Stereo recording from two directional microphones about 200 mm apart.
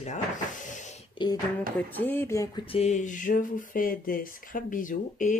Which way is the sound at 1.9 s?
10° left (ahead or behind).